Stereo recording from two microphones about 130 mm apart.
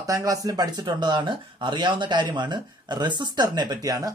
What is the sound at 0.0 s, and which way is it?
Speech, 25° right (ahead or behind).